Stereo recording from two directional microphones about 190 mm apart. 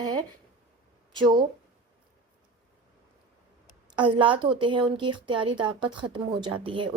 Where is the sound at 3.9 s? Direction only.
25° right (ahead or behind).